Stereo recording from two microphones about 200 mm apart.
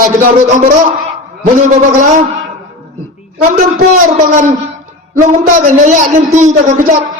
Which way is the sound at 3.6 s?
40° right (ahead or behind).